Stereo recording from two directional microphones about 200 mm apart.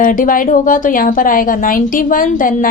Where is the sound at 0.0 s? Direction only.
40° left (ahead or behind).